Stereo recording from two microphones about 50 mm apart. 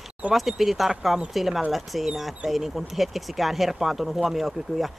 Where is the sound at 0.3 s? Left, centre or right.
Centre.